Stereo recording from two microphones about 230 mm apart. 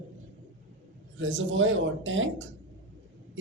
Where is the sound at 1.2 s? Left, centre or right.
Right.